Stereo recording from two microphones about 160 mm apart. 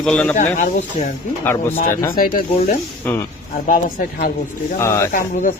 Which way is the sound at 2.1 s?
60° left (ahead or behind).